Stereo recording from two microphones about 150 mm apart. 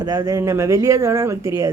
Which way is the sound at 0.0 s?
25° right (ahead or behind).